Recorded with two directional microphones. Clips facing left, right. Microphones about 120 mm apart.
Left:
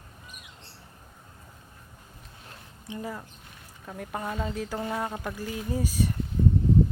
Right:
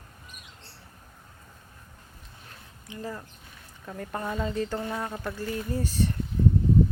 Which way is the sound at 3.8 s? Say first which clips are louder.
Right 1 dB; 5° left (ahead or behind).